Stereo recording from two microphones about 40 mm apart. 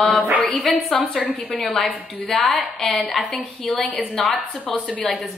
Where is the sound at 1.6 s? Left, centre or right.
Centre.